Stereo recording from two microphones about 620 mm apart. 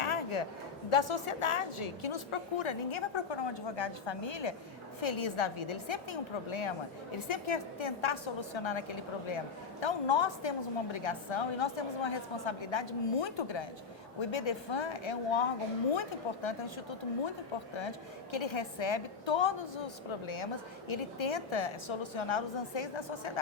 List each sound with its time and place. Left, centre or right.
0.0 s a sound: left
0.9 s a woman's voice: left
17.7 s a woman's voice: left